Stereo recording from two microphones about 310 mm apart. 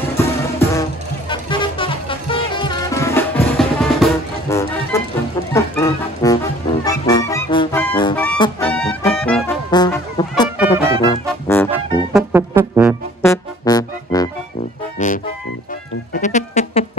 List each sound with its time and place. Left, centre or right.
0.2 s music: centre
9.7 s music: centre
11.7 s music: centre
13.2 s music: centre
15.0 s music: left